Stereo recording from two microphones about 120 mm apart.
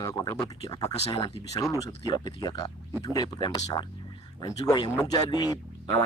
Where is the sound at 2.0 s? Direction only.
35° left (ahead or behind).